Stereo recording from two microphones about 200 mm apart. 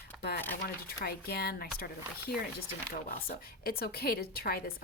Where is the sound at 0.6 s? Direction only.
50° left (ahead or behind).